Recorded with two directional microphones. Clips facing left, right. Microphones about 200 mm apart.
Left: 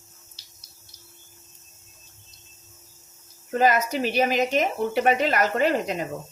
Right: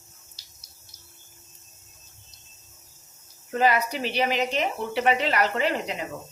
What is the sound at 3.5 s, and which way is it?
Speech, 45° left (ahead or behind).